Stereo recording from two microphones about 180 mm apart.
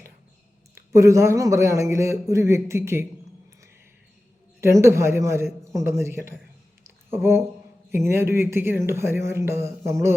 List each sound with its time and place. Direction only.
0.8 s speech: 15° right (ahead or behind)
4.6 s speech: 15° right (ahead or behind)